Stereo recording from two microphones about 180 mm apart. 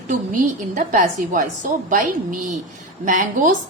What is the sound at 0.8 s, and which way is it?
Speech, 45° right (ahead or behind).